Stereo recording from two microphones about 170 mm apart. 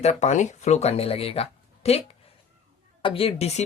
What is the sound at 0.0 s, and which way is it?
Speech, 40° left (ahead or behind).